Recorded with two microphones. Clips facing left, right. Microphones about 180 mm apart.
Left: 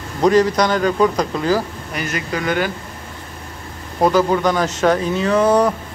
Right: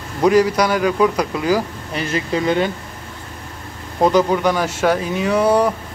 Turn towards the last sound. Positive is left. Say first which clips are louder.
# left 1 dB
turn(degrees=-10)  # may be behind; listen again after turning